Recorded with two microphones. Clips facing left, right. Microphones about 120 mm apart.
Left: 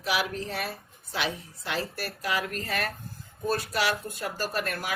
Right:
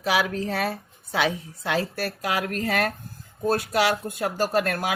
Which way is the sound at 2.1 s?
85° right.